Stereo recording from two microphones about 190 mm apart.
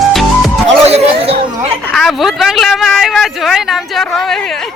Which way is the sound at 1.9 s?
Centre (ahead or behind).